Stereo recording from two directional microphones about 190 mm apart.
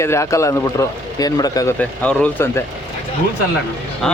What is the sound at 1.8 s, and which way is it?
Speech, 5° left (ahead or behind).